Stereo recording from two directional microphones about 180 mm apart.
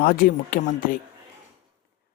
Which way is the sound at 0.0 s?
55° left (ahead or behind).